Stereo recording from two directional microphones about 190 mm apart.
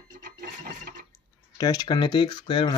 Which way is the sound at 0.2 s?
50° right (ahead or behind).